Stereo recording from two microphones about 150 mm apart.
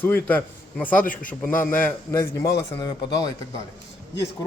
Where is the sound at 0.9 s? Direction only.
65° left (ahead or behind).